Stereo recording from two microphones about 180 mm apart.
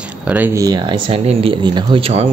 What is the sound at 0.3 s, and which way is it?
Speech, 10° right (ahead or behind).